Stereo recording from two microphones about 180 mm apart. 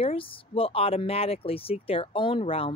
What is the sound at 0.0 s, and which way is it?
Speech, 30° left (ahead or behind).